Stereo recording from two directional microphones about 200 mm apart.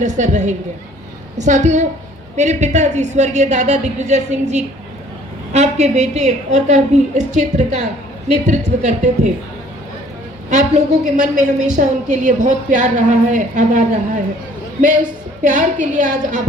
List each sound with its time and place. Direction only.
0.0 s a woman's voice: 35° right (ahead or behind)
10.5 s a woman's voice: 35° right (ahead or behind)
15.4 s a woman's voice: 40° right (ahead or behind)